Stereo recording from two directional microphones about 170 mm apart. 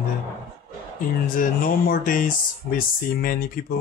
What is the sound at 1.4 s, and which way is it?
Speech, 55° left (ahead or behind).